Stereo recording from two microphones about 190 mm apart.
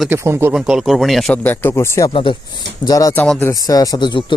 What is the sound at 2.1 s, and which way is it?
Speech, 25° left (ahead or behind).